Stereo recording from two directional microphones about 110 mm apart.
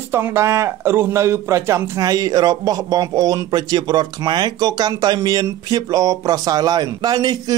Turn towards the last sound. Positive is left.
turn(degrees=-35)  # may be behind; listen again after turning